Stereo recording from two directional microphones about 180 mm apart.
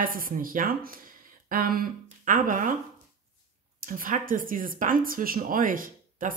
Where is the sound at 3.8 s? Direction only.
50° right (ahead or behind).